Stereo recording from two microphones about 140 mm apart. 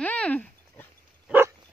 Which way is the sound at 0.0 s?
10° left (ahead or behind).